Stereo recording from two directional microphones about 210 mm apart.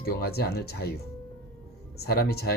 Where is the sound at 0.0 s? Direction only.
50° left (ahead or behind).